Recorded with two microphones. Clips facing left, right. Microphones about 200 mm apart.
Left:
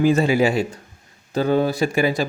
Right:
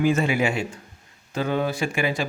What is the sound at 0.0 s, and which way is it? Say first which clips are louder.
Speech: left 5 dB; 35° left (ahead or behind).